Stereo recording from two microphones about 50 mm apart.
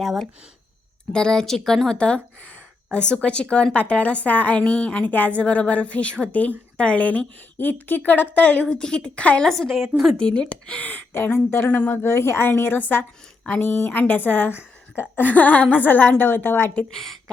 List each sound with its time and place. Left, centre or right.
0.0 s speech: centre
1.1 s speech: centre
2.0 s a woman's voice: left
7.6 s a woman's voice: left
8.7 s a woman's voice: centre
9.4 s speech: centre
10.2 s a woman's voice: centre
11.1 s speech: left
11.9 s speech: left
12.5 s a woman's voice: left
16.9 s a woman's voice: centre